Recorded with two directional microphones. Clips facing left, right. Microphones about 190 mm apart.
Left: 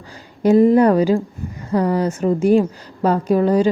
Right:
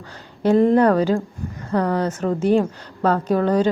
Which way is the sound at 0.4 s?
10° left (ahead or behind).